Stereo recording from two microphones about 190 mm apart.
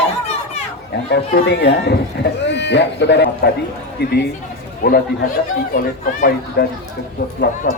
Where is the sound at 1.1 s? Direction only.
60° left (ahead or behind).